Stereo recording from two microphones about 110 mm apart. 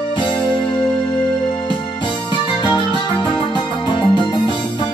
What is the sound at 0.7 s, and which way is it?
Music, 45° left (ahead or behind).